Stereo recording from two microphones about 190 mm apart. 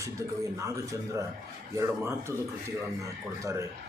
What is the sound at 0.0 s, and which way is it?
Speech, 15° right (ahead or behind).